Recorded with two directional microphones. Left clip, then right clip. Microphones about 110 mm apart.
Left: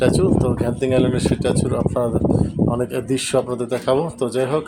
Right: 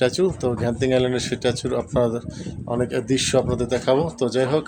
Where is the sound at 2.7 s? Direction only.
25° right (ahead or behind).